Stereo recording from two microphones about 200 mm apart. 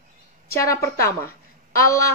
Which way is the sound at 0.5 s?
15° left (ahead or behind).